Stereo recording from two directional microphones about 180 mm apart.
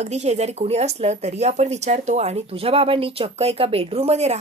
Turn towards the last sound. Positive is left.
turn(degrees=-35)  # may be behind; listen again after turning